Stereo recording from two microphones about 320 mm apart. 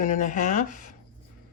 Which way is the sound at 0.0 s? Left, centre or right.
Left.